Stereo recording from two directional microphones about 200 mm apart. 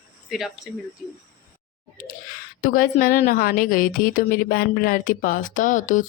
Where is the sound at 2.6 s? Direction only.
45° left (ahead or behind).